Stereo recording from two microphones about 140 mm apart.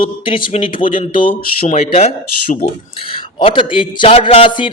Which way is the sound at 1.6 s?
50° left (ahead or behind).